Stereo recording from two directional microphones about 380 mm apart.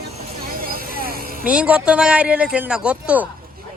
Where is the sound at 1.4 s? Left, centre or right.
Centre.